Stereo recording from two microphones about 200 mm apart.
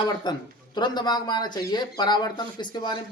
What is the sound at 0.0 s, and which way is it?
Speech, 20° left (ahead or behind).